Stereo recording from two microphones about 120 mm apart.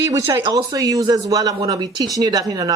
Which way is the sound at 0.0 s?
25° right (ahead or behind).